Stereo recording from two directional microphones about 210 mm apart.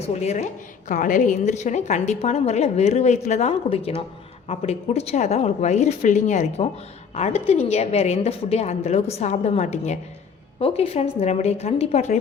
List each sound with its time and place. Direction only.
0.1 s a woman's voice: 30° left (ahead or behind)